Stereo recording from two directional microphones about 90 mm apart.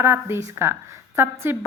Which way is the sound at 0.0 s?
25° right (ahead or behind).